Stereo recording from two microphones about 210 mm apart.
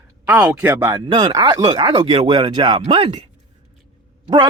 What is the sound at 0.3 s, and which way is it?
Speech, 5° right (ahead or behind).